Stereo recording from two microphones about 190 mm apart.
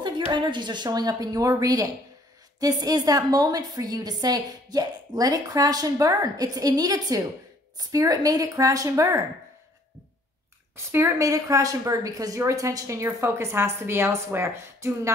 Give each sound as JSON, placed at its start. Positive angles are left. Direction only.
{"t": 0.0, "sound": "a woman's voice", "side_deg": -25}
{"t": 10.9, "sound": "a woman's voice", "side_deg": -15}